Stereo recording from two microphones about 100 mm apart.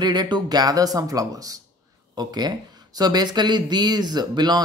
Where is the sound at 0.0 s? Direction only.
45° right (ahead or behind).